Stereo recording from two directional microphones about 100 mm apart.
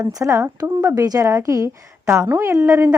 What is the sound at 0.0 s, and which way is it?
A woman's voice, 35° right (ahead or behind).